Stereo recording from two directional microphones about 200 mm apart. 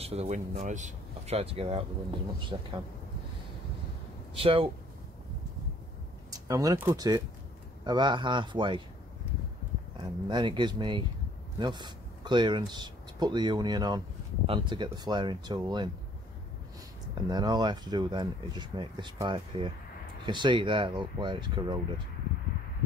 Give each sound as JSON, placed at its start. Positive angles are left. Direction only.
{"t": 0.0, "sound": "speech", "side_deg": -30}
{"t": 4.4, "sound": "speech", "side_deg": -25}
{"t": 6.3, "sound": "speech", "side_deg": -15}
{"t": 10.2, "sound": "speech", "side_deg": -25}
{"t": 17.3, "sound": "speech", "side_deg": -20}